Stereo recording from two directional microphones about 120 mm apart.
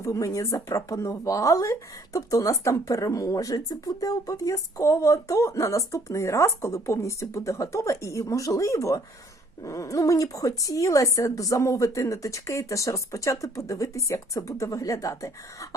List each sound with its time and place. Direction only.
0.0 s speech: 25° left (ahead or behind)